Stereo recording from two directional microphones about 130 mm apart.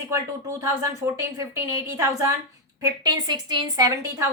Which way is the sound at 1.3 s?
20° right (ahead or behind).